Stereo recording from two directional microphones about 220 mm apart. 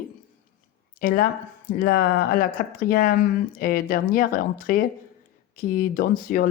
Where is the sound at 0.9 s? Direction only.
40° left (ahead or behind).